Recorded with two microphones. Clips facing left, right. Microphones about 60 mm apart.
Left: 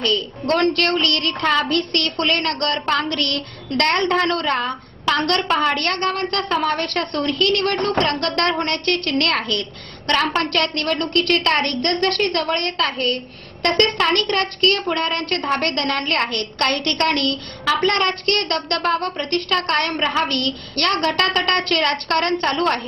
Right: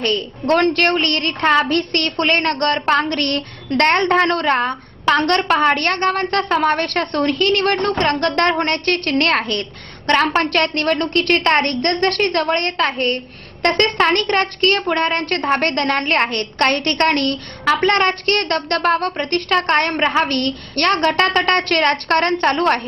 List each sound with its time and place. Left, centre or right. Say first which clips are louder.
0.0 s a woman's voice: right 1 dB; right